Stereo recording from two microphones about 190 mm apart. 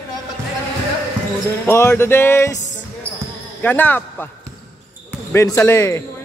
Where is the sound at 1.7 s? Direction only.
15° left (ahead or behind).